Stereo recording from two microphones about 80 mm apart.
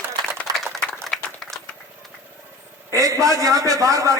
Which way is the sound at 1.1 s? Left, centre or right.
Centre.